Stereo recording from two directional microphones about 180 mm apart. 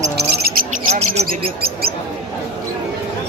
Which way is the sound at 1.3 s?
60° right (ahead or behind).